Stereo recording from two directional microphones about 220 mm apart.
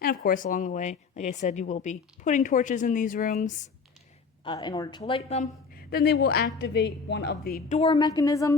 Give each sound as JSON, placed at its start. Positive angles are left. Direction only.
{"t": 0.0, "sound": "a woman's voice", "side_deg": 45}
{"t": 4.4, "sound": "a woman's voice", "side_deg": 20}
{"t": 5.7, "sound": "a woman's voice", "side_deg": 45}
{"t": 7.8, "sound": "a woman's voice", "side_deg": 20}